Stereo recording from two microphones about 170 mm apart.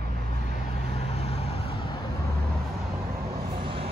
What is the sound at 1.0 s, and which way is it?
Vehicle, 40° left (ahead or behind).